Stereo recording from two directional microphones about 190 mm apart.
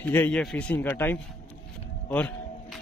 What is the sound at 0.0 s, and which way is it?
A man's voice, 10° left (ahead or behind).